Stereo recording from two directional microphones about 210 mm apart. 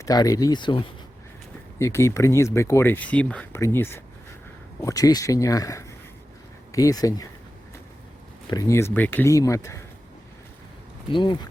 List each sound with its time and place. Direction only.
0.0 s speech: 15° left (ahead or behind)
8.4 s speech: 15° left (ahead or behind)
11.1 s speech: 20° left (ahead or behind)